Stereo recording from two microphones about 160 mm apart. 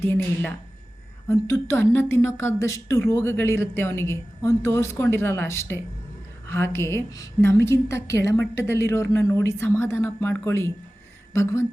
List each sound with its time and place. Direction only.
0.0 s a woman's voice: 15° left (ahead or behind)